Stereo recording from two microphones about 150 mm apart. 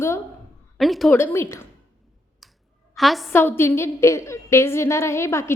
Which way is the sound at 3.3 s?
15° left (ahead or behind).